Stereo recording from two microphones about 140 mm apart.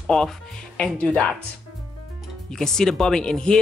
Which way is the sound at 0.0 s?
5° left (ahead or behind).